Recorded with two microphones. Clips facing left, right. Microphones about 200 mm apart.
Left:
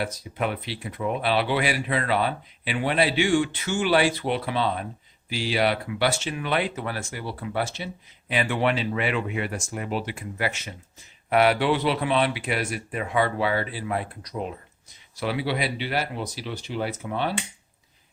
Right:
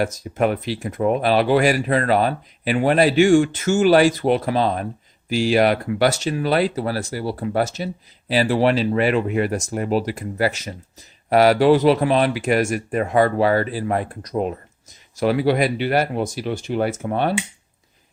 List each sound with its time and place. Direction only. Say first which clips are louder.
0.0 s speech: right 8 dB; 45° right (ahead or behind)